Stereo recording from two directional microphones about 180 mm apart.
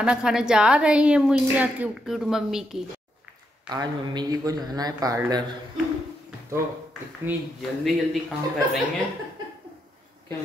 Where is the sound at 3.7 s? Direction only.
20° right (ahead or behind).